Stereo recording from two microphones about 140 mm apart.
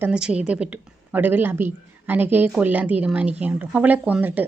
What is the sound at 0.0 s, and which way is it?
Speech, 5° right (ahead or behind).